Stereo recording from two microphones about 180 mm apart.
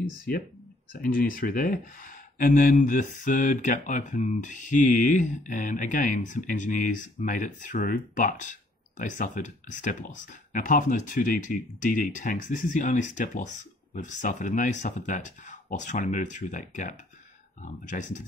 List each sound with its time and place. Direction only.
1.0 s speech: 50° left (ahead or behind)